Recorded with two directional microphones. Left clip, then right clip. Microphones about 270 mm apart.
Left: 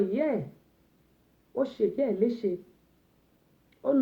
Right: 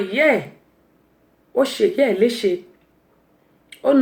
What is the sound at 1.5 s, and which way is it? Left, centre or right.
Speech, centre.